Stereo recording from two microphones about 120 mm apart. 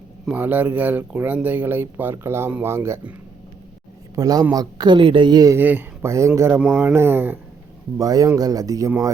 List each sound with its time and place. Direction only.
0.3 s speech: 15° right (ahead or behind)
4.1 s speech: 30° right (ahead or behind)
5.5 s speech: 15° right (ahead or behind)
7.9 s speech: 30° right (ahead or behind)